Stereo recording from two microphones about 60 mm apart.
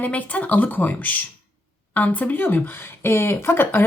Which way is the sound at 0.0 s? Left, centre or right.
Left.